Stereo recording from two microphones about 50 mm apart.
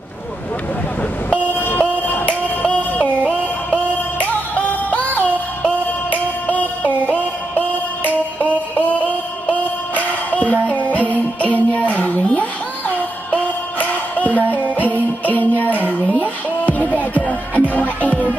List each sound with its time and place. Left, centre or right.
1.6 s music: left